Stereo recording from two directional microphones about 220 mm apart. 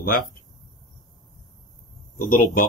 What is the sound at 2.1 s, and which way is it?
Speech, 40° left (ahead or behind).